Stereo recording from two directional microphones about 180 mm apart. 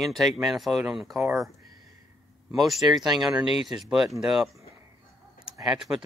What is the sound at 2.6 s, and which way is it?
Speech, centre (ahead or behind).